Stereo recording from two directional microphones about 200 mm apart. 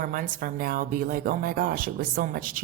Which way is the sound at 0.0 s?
45° right (ahead or behind).